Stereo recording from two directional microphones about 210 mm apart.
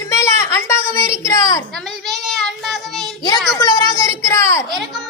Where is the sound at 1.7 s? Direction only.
Centre (ahead or behind).